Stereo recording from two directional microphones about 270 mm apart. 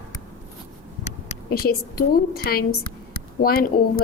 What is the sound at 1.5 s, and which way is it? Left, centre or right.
A woman's voice, left.